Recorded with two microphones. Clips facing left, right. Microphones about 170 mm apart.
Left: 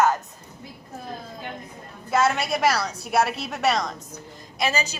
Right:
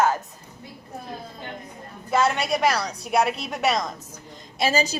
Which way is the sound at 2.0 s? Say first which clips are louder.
Even; 5° left (ahead or behind).